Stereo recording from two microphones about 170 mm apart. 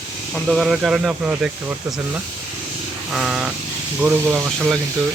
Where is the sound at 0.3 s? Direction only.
Centre (ahead or behind).